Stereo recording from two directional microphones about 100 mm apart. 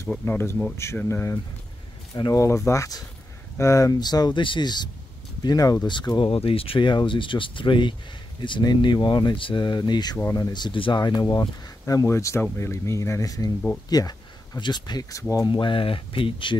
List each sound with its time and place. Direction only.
0.3 s speech: 20° left (ahead or behind)
2.1 s speech: 45° left (ahead or behind)
2.4 s speech: 30° left (ahead or behind)
6.1 s speech: 60° left (ahead or behind); by 11.4 s 45° left (ahead or behind)
11.8 s speech: 30° left (ahead or behind); by 16.5 s 60° left (ahead or behind)